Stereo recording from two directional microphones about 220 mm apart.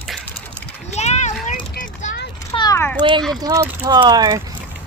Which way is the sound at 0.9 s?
30° left (ahead or behind).